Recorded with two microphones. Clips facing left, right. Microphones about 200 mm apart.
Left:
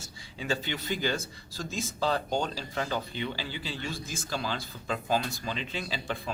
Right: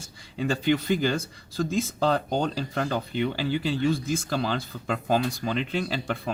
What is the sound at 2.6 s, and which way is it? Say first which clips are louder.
Speech: right 5 dB; 50° right (ahead or behind).